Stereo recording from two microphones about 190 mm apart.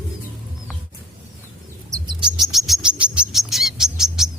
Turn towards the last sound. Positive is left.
turn(degrees=0)  # may be behind; listen again after turning